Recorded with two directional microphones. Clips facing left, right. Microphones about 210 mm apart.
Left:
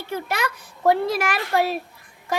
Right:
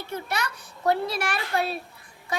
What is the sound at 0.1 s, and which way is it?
Speech, 55° left (ahead or behind).